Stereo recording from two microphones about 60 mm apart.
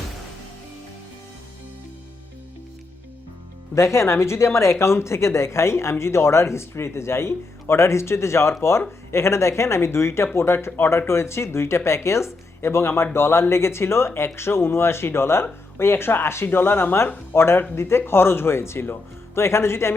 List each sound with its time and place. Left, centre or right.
3.8 s speech: left